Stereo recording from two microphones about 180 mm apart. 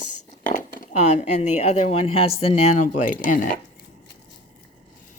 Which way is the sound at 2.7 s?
45° left (ahead or behind).